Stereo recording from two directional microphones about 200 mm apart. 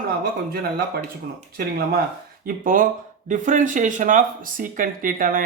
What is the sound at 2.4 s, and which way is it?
Speech, 45° right (ahead or behind).